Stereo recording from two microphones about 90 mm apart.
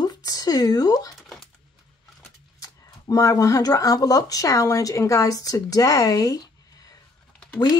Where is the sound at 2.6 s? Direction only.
40° left (ahead or behind).